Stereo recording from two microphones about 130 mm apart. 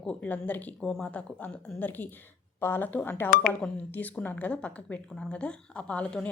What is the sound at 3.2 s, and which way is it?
Speech, 90° left.